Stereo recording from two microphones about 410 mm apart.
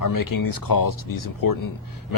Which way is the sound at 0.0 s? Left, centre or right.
Left.